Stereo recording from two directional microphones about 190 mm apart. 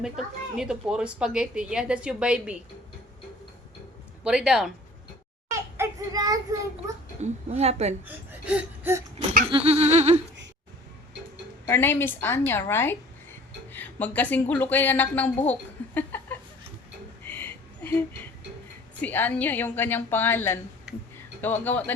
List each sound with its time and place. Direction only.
0.0 s a woman's voice: 5° right (ahead or behind)
4.2 s a woman's voice: 5° right (ahead or behind)
5.5 s a sound: 15° right (ahead or behind)
7.2 s a woman's voice: 35° right (ahead or behind)
8.0 s speech: 10° right (ahead or behind)
9.1 s goat: 45° right (ahead or behind)
9.5 s a woman's voice: 30° right (ahead or behind)
11.6 s a woman's voice: 10° left (ahead or behind)
16.0 s a sound: 10° left (ahead or behind)
18.9 s a woman's voice: 10° left (ahead or behind)
20.9 s speech: 5° right (ahead or behind)
21.4 s a woman's voice: 10° left (ahead or behind)